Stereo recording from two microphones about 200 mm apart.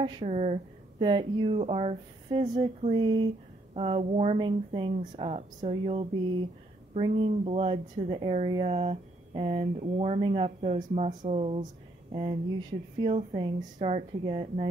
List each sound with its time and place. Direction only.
0.0 s speech: 25° right (ahead or behind)
13.6 s speech: 35° right (ahead or behind)